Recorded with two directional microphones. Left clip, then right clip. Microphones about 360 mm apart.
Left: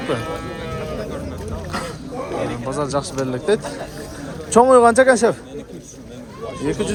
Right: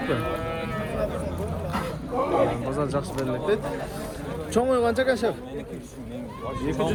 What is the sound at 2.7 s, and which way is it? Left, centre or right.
Speech, centre.